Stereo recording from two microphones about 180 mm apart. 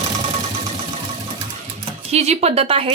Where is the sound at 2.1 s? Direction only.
35° right (ahead or behind).